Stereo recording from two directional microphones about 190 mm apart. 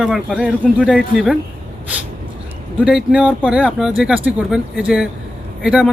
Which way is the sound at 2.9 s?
5° right (ahead or behind).